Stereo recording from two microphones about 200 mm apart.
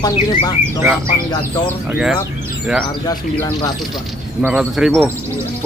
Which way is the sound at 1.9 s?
5° right (ahead or behind).